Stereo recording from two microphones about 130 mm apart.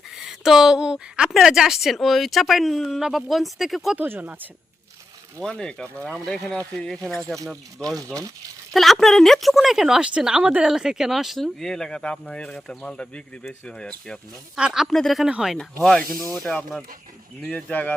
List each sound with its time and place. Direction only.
0.2 s speech: 5° right (ahead or behind)
3.9 s speech: 15° right (ahead or behind)
5.4 s speech: 5° left (ahead or behind)
7.9 s speech: 25° right (ahead or behind)
8.7 s speech: centre (ahead or behind)
14.5 s speech: 5° right (ahead or behind); by 17.9 s 10° left (ahead or behind)